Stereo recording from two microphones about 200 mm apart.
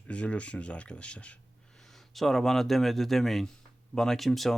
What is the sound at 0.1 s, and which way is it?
Speech, 5° left (ahead or behind).